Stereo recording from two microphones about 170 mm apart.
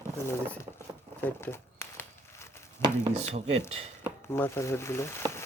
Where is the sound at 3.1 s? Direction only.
40° right (ahead or behind).